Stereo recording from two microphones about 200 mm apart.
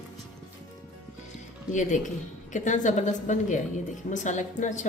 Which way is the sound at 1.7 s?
40° left (ahead or behind).